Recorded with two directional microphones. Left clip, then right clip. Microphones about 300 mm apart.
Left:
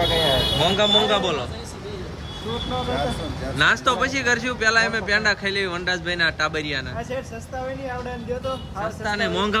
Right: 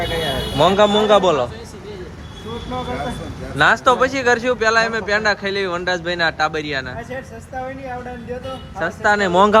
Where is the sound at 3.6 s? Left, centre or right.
Centre.